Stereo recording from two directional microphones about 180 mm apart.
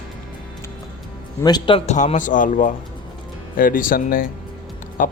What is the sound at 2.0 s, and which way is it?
Speech, 45° left (ahead or behind).